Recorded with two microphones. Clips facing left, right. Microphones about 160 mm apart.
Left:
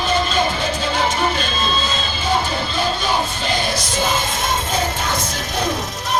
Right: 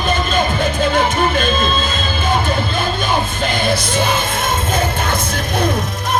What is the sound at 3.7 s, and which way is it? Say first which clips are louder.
Music: right 4 dB; 55° right (ahead or behind).